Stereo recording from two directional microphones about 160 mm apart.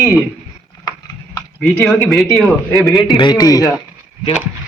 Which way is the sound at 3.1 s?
25° left (ahead or behind).